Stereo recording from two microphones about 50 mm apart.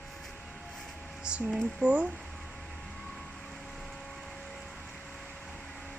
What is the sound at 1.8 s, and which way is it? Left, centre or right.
Speech, right.